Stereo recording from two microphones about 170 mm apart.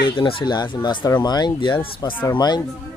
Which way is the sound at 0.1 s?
30° left (ahead or behind).